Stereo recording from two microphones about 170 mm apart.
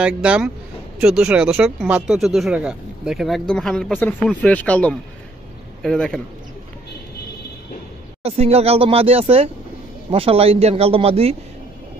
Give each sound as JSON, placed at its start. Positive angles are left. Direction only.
{"t": 0.0, "sound": "speech", "side_deg": -5}
{"t": 8.2, "sound": "speech", "side_deg": -35}